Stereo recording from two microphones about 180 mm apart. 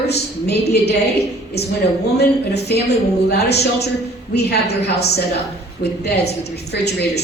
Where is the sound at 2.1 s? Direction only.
65° left (ahead or behind).